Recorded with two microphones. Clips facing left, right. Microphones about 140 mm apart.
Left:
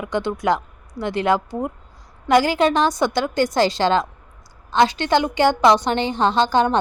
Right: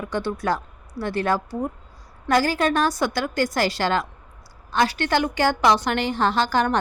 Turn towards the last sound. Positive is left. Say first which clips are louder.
# left 4 dB
turn(degrees=20)  # may be behind; listen again after turning